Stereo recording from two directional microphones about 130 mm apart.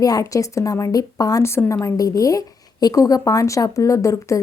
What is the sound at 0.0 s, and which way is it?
A woman's voice, 25° left (ahead or behind).